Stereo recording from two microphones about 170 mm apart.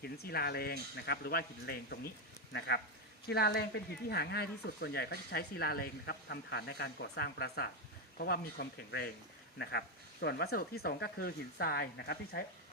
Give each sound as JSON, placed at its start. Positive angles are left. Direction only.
{"t": 0.0, "sound": "speech", "side_deg": 70}
{"t": 2.5, "sound": "speech", "side_deg": 90}
{"t": 3.2, "sound": "speech", "side_deg": 70}
{"t": 9.6, "sound": "speech", "side_deg": 85}